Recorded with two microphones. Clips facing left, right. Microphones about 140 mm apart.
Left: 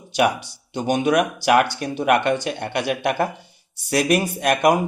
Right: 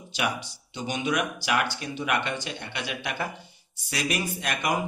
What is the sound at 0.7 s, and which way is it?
Speech, 55° left (ahead or behind).